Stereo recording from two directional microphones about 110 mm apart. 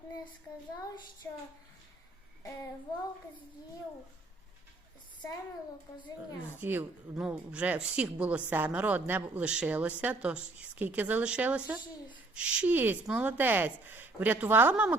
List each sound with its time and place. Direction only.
0.8 s child singing: 40° left (ahead or behind)
6.6 s a woman's voice: 20° right (ahead or behind)